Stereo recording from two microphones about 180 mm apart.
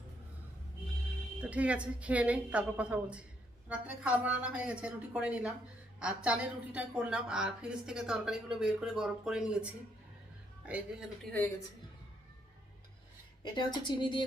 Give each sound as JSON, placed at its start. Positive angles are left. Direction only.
{"t": 1.4, "sound": "a woman's voice", "side_deg": -5}
{"t": 10.7, "sound": "a woman's voice", "side_deg": -10}
{"t": 11.3, "sound": "a woman's voice", "side_deg": 10}
{"t": 13.4, "sound": "speech", "side_deg": 25}